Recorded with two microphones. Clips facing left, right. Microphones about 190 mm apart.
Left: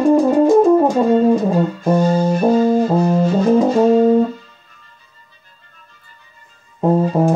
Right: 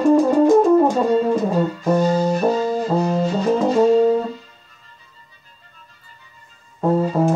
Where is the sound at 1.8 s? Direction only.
10° left (ahead or behind).